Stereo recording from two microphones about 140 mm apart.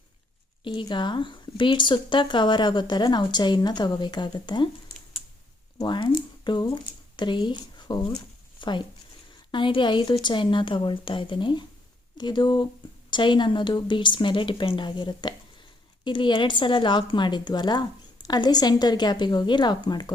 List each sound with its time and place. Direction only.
0.6 s speech: 35° left (ahead or behind)
5.8 s speech: 35° left (ahead or behind)